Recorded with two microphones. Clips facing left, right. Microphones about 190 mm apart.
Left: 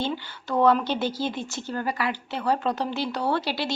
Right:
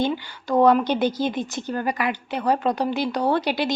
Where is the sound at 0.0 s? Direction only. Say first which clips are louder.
Right 5 dB; 15° right (ahead or behind).